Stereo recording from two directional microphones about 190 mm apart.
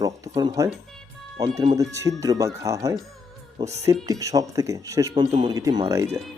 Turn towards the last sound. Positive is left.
turn(degrees=-15)  # may be behind; listen again after turning